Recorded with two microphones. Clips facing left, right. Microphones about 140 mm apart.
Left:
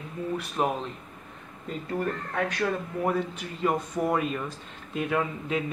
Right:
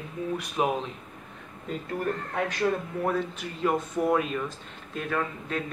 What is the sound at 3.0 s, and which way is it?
A man's voice, 5° left (ahead or behind).